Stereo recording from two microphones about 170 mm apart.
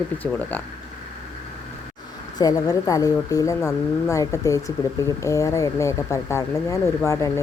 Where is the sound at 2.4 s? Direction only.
20° left (ahead or behind).